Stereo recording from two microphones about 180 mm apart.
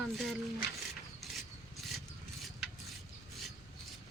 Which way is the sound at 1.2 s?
Centre (ahead or behind).